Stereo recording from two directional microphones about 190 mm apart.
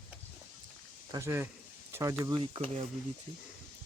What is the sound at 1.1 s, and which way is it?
Speech, 15° right (ahead or behind).